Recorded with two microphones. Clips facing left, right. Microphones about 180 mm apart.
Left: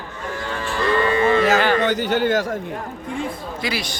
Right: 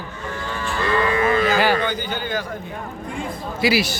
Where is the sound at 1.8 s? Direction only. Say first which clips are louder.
Left 6 dB; 75° left (ahead or behind).